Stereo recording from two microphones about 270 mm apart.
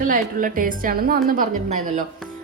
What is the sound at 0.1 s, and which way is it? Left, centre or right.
A woman's voice, right.